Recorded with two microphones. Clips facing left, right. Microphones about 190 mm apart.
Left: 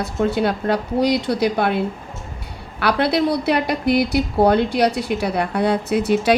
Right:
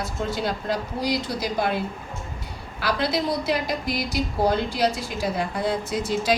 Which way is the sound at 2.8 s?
65° left (ahead or behind).